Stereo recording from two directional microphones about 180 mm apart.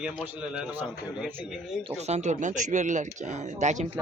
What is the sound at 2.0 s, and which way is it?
Speech, 40° right (ahead or behind).